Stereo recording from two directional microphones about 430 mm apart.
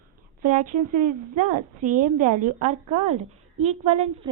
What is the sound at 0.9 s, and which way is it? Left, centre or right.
A woman's voice, centre.